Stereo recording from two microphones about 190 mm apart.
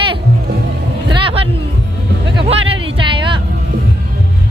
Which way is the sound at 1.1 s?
30° right (ahead or behind).